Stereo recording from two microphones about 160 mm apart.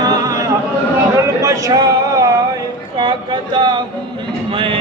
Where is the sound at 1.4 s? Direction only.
20° right (ahead or behind).